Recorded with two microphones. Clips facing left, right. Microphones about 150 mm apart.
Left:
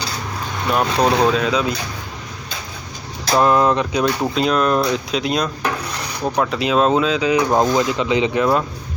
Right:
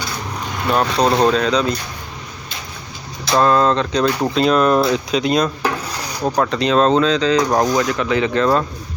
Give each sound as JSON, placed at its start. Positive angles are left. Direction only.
{"t": 0.7, "sound": "speech", "side_deg": 0}
{"t": 3.3, "sound": "speech", "side_deg": 15}
{"t": 4.4, "sound": "speech", "side_deg": 0}
{"t": 6.5, "sound": "speech", "side_deg": 5}